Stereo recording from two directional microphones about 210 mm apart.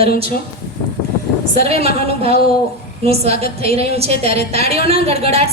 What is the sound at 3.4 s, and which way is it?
A woman's voice, 30° right (ahead or behind).